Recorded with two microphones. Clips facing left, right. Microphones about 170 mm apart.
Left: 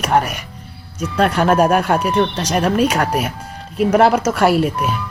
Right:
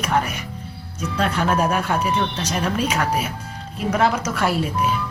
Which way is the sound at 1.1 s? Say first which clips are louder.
Left 7 dB; 60° left (ahead or behind).